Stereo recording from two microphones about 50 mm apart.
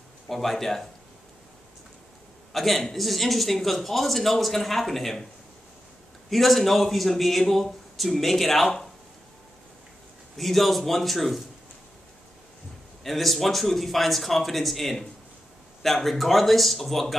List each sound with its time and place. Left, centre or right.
0.3 s speech: centre
2.5 s speech: centre
6.3 s speech: centre
10.3 s speech: centre
13.0 s speech: centre